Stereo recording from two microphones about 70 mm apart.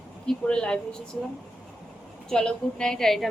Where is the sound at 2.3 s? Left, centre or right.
Centre.